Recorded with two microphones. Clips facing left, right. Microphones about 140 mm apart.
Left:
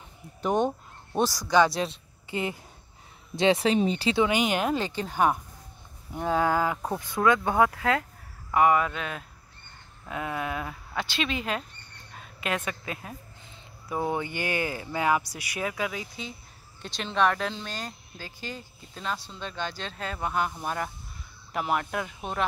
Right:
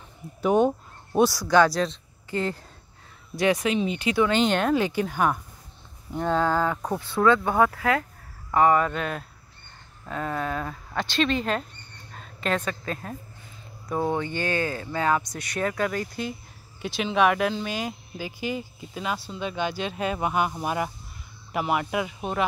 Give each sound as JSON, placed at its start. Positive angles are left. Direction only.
{"t": 0.4, "sound": "cricket", "side_deg": -10}
{"t": 2.3, "sound": "speech", "side_deg": 15}
{"t": 3.3, "sound": "speech", "side_deg": 25}
{"t": 4.2, "sound": "speech", "side_deg": 10}
{"t": 4.7, "sound": "speech", "side_deg": -10}
{"t": 5.0, "sound": "speech", "side_deg": 0}
{"t": 6.1, "sound": "speech", "side_deg": 10}
{"t": 8.5, "sound": "a woman's voice", "side_deg": 10}